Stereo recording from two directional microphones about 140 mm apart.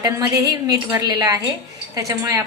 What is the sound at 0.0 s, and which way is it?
A woman's voice, 25° right (ahead or behind).